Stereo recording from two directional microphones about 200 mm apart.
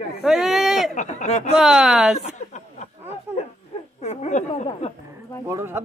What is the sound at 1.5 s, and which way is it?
Speech, 5° right (ahead or behind).